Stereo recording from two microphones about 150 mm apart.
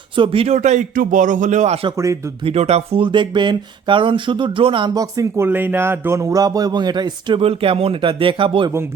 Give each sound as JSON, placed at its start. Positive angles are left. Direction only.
{"t": 0.2, "sound": "a man's voice", "side_deg": -40}
{"t": 1.9, "sound": "speech", "side_deg": -20}
{"t": 2.4, "sound": "speech", "side_deg": -45}